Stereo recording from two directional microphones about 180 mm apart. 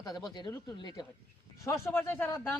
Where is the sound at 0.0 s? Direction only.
20° left (ahead or behind).